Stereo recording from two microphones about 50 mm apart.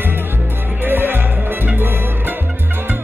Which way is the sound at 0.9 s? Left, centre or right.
Right.